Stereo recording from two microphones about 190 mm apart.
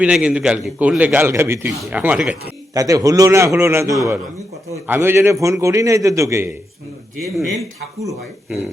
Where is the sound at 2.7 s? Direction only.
20° right (ahead or behind).